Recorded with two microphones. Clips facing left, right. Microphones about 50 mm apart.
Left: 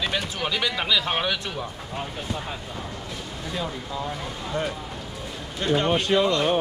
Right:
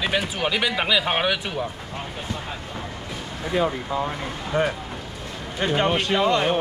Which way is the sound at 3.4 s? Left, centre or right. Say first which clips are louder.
Right 9 dB; right.